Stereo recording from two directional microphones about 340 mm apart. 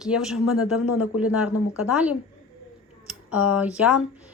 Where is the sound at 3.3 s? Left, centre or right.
Centre.